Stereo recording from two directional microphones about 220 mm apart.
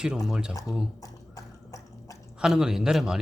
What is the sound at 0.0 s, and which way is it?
Speech, centre (ahead or behind).